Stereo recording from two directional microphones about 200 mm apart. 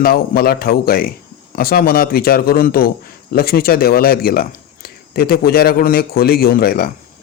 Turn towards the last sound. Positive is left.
turn(degrees=50)  # may be behind; listen again after turning